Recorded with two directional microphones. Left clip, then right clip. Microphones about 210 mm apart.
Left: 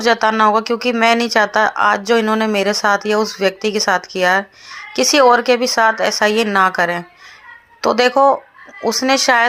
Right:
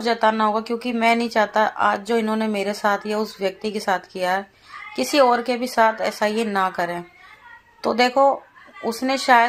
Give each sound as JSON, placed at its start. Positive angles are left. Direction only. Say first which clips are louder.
{"t": 0.0, "sound": "speech", "louder": "left 6 dB", "side_deg": 20}